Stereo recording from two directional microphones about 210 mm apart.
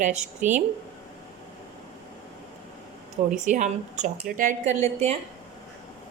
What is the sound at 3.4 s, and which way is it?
Speech, 35° right (ahead or behind).